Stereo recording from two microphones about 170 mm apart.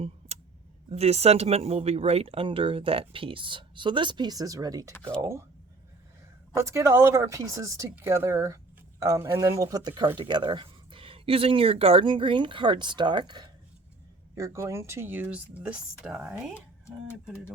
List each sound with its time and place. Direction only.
0.9 s speech: 40° right (ahead or behind); by 4.9 s 20° right (ahead or behind)
4.9 s speech: 5° left (ahead or behind)
5.2 s speech: 15° right (ahead or behind)
6.6 s speech: 15° right (ahead or behind)